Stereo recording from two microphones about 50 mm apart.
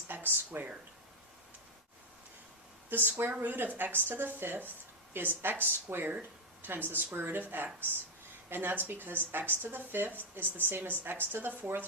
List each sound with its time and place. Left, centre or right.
0.1 s speech: right
2.9 s speech: right